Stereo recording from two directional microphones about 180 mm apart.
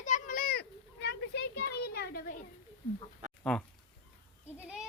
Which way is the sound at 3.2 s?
40° right (ahead or behind).